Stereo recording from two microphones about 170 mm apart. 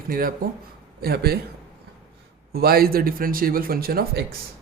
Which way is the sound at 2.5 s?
65° right (ahead or behind).